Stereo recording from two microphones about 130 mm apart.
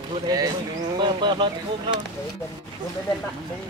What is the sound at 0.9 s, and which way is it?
Speech, 35° right (ahead or behind).